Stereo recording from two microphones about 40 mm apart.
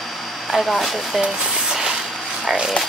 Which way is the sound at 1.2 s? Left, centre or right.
Centre.